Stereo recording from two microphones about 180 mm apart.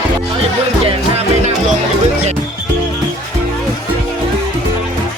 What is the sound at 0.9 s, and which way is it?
Music, 35° right (ahead or behind).